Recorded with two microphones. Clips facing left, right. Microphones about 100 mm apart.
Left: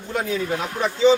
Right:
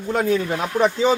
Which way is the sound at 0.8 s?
45° right (ahead or behind).